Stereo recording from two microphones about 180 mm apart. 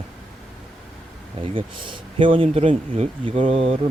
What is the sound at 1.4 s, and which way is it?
Speech, 30° right (ahead or behind).